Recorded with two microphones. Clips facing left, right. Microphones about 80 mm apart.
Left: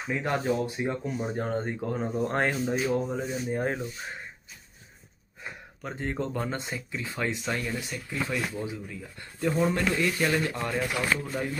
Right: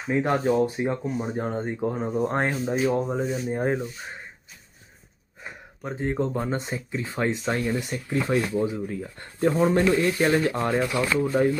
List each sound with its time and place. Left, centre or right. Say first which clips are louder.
0.1 s speech: right 6 dB; right
2.9 s speech: right 3 dB; right
3.5 s speech: right 4 dB; centre
5.9 s speech: right 5 dB; centre
6.6 s speech: right 4 dB; right